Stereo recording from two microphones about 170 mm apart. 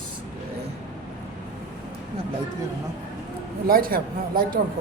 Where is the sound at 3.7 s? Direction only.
60° right (ahead or behind).